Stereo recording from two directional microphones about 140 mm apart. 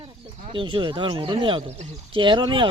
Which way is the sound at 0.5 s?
35° right (ahead or behind).